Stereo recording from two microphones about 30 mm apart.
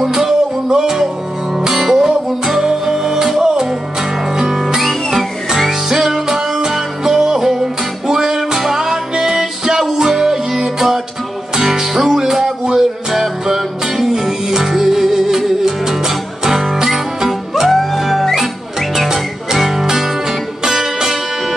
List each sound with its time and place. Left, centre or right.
0.0 s music: centre
4.7 s music: centre